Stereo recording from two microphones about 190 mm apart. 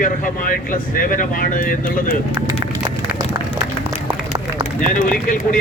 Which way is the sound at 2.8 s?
20° right (ahead or behind).